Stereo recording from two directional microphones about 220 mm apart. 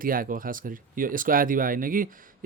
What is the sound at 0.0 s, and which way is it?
Speech, 40° right (ahead or behind).